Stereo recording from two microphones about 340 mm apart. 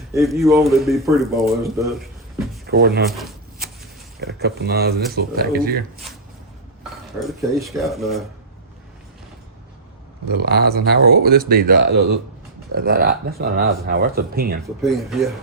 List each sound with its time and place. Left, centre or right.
0.1 s speech: centre
2.6 s speech: right
3.1 s speech: centre
4.2 s speech: right
7.3 s speech: centre
10.3 s speech: right
14.8 s speech: centre